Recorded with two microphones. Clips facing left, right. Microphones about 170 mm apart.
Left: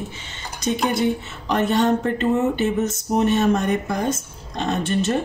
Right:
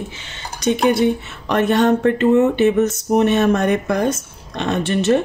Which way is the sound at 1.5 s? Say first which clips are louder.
Right 4 dB; 65° right (ahead or behind).